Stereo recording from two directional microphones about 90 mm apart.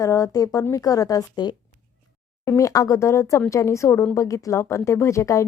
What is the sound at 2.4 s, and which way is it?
A woman's voice, 35° left (ahead or behind).